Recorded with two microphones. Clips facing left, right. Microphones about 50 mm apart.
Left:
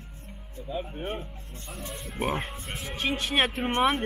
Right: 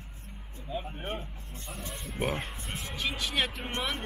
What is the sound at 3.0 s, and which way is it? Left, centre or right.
Speech, left.